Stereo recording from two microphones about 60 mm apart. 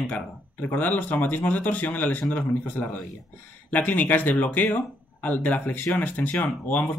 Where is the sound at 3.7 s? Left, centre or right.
Left.